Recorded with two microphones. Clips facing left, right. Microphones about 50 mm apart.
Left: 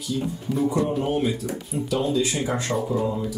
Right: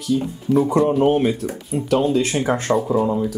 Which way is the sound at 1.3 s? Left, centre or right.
Right.